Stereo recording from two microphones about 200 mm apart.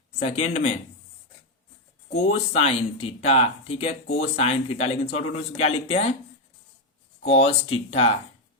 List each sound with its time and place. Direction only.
0.2 s speech: 30° left (ahead or behind)
2.1 s speech: 30° left (ahead or behind)
7.3 s speech: 30° left (ahead or behind)